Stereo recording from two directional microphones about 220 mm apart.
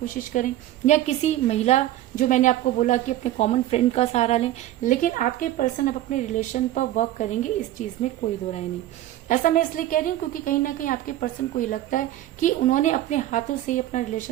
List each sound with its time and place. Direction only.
0.0 s a woman's voice: 35° left (ahead or behind)
9.3 s a woman's voice: 35° left (ahead or behind)